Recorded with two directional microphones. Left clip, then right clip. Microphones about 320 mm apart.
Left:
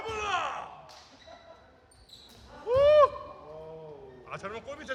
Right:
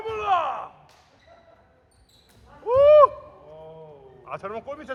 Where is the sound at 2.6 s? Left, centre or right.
Centre.